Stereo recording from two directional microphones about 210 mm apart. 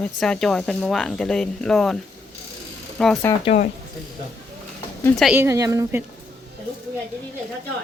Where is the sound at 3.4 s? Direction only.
30° left (ahead or behind).